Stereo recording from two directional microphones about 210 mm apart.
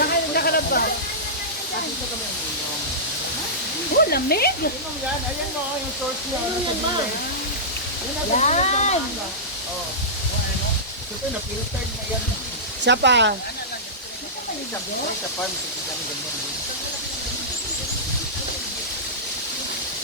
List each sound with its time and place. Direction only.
0.0 s hiss: 45° left (ahead or behind)
3.9 s speech: 50° left (ahead or behind)
8.4 s speech: 35° left (ahead or behind)
12.8 s speech: 55° right (ahead or behind)